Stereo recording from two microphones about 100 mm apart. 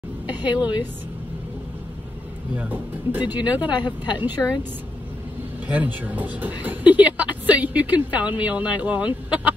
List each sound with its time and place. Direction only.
0.3 s a woman's voice: 15° right (ahead or behind)
2.5 s speech: 15° right (ahead or behind)
5.7 s speech: 15° right (ahead or behind)